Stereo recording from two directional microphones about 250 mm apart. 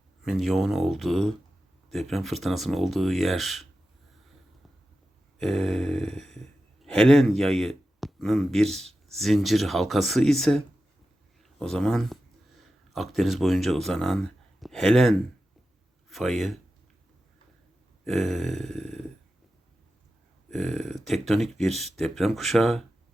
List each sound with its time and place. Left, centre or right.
0.2 s speech: centre
5.4 s a sound: centre
6.8 s speech: centre
18.0 s speech: centre
20.5 s speech: centre